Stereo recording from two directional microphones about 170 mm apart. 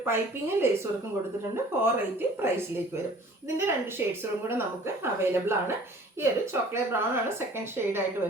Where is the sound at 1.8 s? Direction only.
10° right (ahead or behind).